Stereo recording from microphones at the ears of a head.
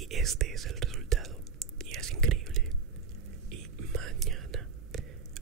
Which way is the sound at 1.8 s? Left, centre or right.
Right.